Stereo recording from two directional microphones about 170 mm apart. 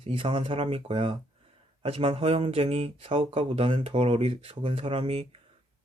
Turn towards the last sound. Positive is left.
turn(degrees=-35)  # may be behind; listen again after turning